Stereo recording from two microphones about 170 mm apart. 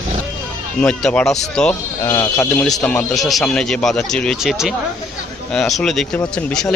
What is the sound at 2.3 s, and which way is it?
Speech, 5° left (ahead or behind).